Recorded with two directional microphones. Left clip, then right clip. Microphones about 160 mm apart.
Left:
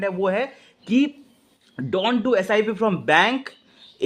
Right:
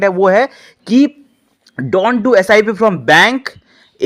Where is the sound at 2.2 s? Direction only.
40° right (ahead or behind).